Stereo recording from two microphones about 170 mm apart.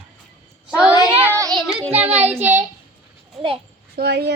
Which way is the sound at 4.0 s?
70° right (ahead or behind).